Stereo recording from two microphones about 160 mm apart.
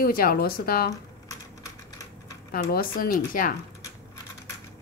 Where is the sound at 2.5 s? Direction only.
65° left (ahead or behind).